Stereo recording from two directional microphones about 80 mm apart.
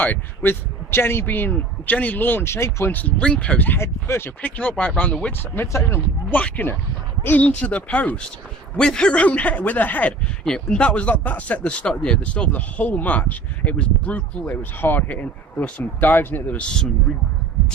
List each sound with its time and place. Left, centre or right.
0.0 s speech: left
2.9 s speech: centre
3.8 s speech: left
4.4 s speech: centre
5.4 s speech: left
16.6 s speech: centre